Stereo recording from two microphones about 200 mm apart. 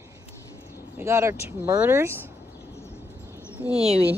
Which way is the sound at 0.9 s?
15° right (ahead or behind).